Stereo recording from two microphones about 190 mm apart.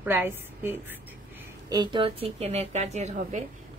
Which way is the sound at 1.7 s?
25° right (ahead or behind).